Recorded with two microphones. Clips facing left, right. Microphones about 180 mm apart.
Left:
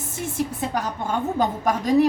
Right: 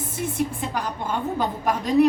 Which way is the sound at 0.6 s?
45° left (ahead or behind).